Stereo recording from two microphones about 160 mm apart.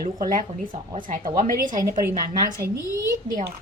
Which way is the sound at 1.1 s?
60° right (ahead or behind).